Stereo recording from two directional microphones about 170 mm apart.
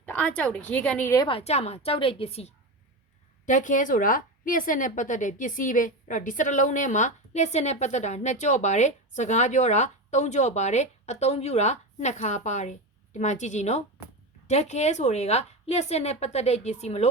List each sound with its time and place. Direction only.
0.0 s a woman's voice: 10° left (ahead or behind)
1.3 s a woman's voice: 35° left (ahead or behind)
3.4 s a woman's voice: 50° left (ahead or behind)